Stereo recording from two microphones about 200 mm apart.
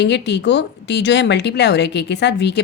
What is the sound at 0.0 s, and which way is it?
Speech, 60° left (ahead or behind).